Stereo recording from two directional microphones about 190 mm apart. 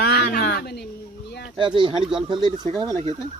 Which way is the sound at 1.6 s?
25° right (ahead or behind).